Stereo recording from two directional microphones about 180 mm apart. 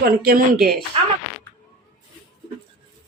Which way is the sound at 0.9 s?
30° right (ahead or behind).